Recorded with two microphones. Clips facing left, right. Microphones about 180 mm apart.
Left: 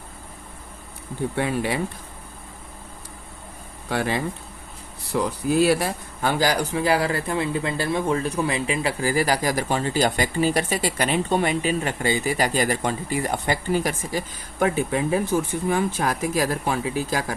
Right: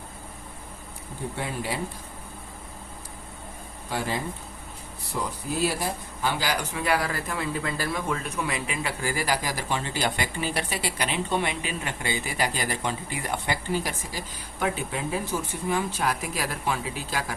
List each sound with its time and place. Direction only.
1.4 s speech: 70° left (ahead or behind)
3.8 s speech: 70° left (ahead or behind)
6.2 s speech: 40° left (ahead or behind)